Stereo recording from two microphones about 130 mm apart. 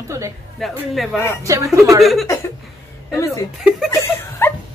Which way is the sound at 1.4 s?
25° right (ahead or behind).